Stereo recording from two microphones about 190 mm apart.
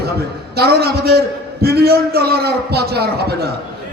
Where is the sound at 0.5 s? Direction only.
55° right (ahead or behind).